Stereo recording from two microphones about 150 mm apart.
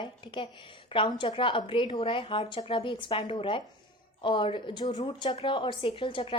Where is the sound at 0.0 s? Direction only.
35° left (ahead or behind).